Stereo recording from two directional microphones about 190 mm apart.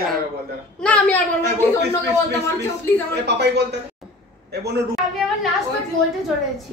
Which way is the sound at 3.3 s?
60° right (ahead or behind).